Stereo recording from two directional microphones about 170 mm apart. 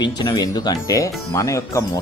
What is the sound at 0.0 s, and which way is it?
Speech, 25° left (ahead or behind).